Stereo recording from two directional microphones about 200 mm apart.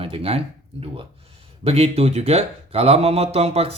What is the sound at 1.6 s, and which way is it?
A man's voice, 30° right (ahead or behind).